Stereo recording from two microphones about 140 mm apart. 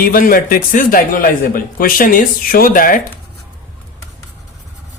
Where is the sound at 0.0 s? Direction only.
90° left.